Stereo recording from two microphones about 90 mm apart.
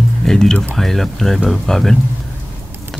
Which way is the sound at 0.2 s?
5° left (ahead or behind).